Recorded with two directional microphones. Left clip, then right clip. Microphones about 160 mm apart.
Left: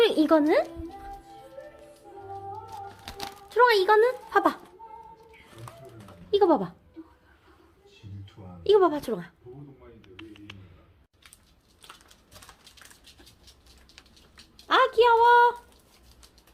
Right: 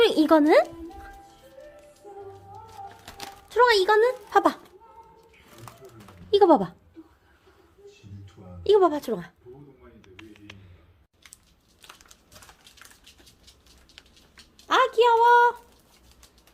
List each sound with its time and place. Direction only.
0.0 s speech: 25° right (ahead or behind)
3.0 s a sound: centre (ahead or behind)
3.5 s speech: 20° right (ahead or behind)
6.3 s speech: 30° right (ahead or behind)
8.6 s a woman's voice: 15° right (ahead or behind)
10.0 s a sound: 15° right (ahead or behind)
14.7 s a woman's voice: 10° right (ahead or behind)